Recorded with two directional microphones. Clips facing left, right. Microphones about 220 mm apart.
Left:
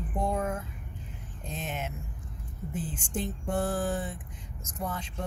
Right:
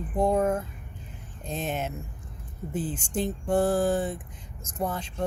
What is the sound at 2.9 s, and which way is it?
Speech, 30° right (ahead or behind).